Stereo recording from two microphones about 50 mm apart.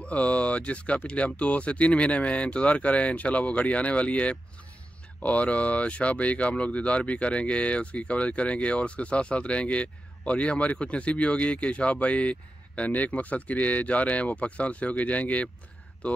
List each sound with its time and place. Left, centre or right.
0.0 s speech: left